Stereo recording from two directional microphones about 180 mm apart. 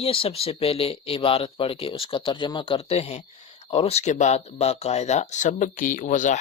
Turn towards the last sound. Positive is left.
turn(degrees=45)  # may be behind; listen again after turning